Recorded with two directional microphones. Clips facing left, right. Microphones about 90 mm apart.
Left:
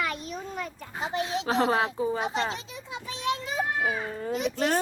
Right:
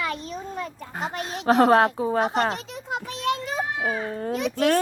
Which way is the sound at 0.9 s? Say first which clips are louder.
Left 1 dB; 55° right (ahead or behind).